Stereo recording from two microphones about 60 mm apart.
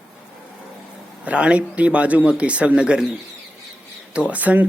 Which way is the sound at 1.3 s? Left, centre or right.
Centre.